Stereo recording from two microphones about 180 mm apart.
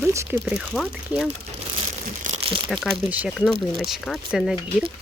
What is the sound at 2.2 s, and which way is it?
Crumpling, 35° right (ahead or behind).